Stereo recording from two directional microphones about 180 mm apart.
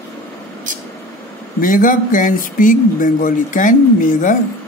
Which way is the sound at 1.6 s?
50° left (ahead or behind).